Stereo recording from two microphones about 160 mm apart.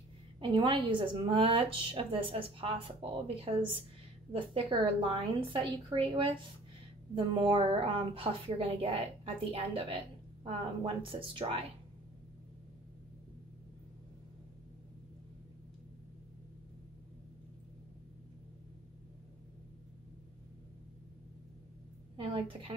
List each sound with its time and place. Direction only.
0.4 s a woman's voice: 30° right (ahead or behind)
22.1 s a woman's voice: 35° right (ahead or behind)